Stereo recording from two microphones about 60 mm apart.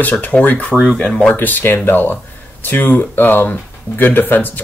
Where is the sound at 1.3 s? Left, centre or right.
Left.